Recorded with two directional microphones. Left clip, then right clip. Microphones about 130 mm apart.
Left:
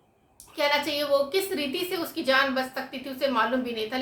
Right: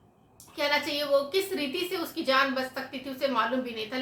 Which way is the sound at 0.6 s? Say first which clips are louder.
Left 3 dB; 20° left (ahead or behind).